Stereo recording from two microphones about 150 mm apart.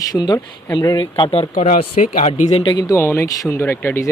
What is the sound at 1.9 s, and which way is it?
Speech, 55° left (ahead or behind).